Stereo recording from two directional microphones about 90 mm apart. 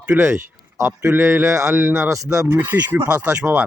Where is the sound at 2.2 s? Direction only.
40° right (ahead or behind).